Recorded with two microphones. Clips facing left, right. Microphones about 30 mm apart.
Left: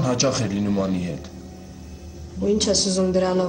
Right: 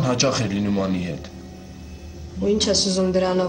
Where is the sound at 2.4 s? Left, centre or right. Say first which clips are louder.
Right 1 dB; centre.